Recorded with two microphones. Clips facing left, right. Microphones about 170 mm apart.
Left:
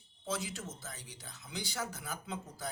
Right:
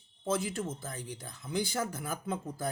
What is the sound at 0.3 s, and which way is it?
Speech, 50° right (ahead or behind).